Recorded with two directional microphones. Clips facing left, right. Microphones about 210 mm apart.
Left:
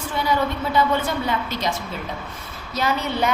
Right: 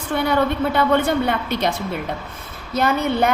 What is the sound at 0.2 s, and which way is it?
A woman's voice, 60° right (ahead or behind).